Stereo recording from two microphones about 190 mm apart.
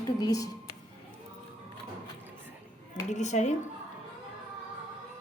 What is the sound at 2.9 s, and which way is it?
Speech, 40° left (ahead or behind).